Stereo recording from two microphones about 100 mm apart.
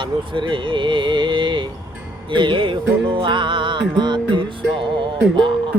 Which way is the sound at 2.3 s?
55° right (ahead or behind).